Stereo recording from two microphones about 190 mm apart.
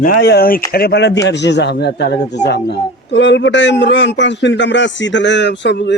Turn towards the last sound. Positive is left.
turn(degrees=65)  # may be behind; listen again after turning